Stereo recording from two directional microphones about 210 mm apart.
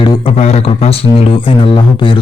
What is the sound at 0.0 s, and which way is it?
Speech, 25° left (ahead or behind).